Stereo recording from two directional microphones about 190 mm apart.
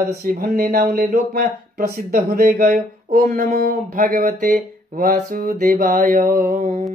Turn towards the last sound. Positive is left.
turn(degrees=-45)  # may be behind; listen again after turning